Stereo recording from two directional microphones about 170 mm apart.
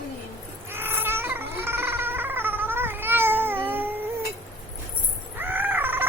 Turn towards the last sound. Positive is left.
turn(degrees=-10)  # may be behind; listen again after turning